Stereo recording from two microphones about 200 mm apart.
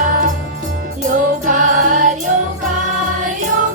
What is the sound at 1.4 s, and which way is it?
Music, 40° right (ahead or behind).